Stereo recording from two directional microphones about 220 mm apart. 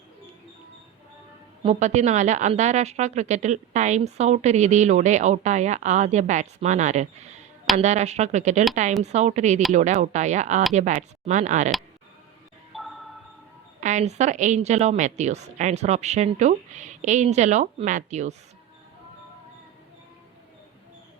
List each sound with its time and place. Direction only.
1.6 s a woman's voice: 30° right (ahead or behind)
12.7 s marimba: centre (ahead or behind)
13.8 s a woman's voice: 30° right (ahead or behind)